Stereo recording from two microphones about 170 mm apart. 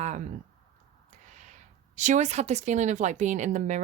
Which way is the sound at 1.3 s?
45° right (ahead or behind).